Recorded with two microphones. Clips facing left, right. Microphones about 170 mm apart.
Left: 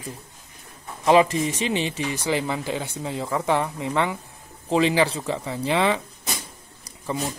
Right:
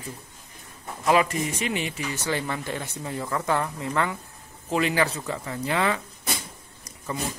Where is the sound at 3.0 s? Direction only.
15° left (ahead or behind).